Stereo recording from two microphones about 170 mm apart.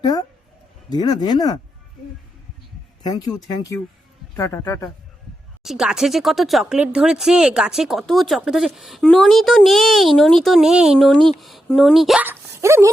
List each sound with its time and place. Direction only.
0.0 s speech: 25° left (ahead or behind)
3.0 s speech: 25° left (ahead or behind)
4.4 s a man's voice: 15° left (ahead or behind)
5.6 s speech: 5° right (ahead or behind)
12.2 s speech: 15° right (ahead or behind)